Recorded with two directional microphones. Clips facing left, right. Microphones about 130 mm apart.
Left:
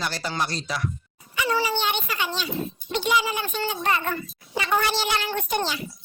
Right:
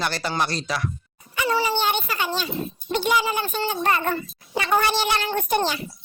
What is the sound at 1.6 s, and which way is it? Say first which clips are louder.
A child's voice: right 3 dB; 45° right (ahead or behind).